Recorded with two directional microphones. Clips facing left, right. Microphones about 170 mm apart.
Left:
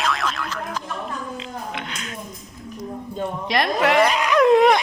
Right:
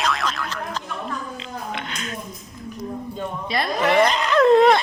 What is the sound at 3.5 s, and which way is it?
Speech, 90° left.